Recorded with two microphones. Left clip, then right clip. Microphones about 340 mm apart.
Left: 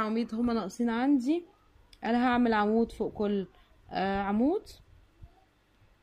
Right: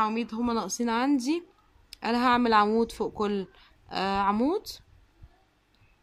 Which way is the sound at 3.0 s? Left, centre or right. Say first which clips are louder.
Right 2 dB; right.